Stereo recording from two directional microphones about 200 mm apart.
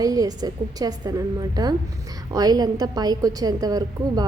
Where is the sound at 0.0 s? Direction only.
20° right (ahead or behind).